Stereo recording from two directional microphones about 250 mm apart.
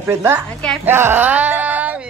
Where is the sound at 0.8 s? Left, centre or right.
Centre.